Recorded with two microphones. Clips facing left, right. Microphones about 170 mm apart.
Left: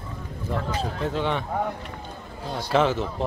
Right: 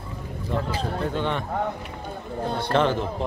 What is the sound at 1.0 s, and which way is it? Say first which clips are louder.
Speech: left 2 dB; centre (ahead or behind).